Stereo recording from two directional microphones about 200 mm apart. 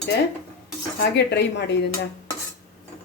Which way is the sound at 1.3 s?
60° left (ahead or behind).